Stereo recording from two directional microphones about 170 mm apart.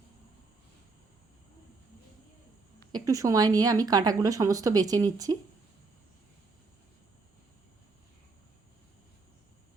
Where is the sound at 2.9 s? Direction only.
20° right (ahead or behind).